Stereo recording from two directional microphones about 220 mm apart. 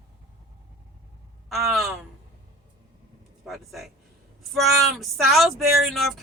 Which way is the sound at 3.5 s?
Centre (ahead or behind).